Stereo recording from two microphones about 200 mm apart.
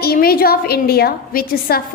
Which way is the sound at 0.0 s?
50° left (ahead or behind).